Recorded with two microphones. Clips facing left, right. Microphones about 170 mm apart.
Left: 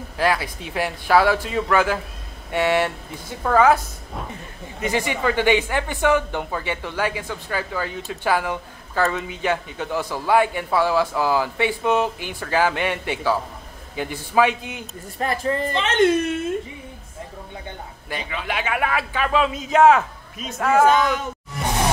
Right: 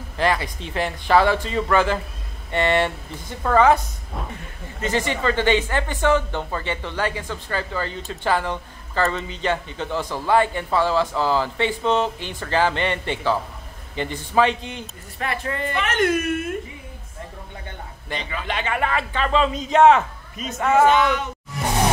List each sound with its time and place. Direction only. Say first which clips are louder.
0.2 s a woman's voice: even; 5° left (ahead or behind)
4.7 s speech: even; 10° left (ahead or behind)
15.1 s speech: left 4 dB; 35° left (ahead or behind)
18.1 s speech: even; 5° left (ahead or behind)